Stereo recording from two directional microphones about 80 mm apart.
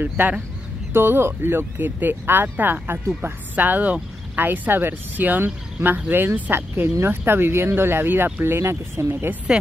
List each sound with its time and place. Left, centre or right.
0.9 s speech: right